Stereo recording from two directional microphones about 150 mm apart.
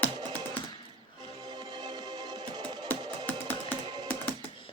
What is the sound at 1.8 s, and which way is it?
Music, 25° right (ahead or behind).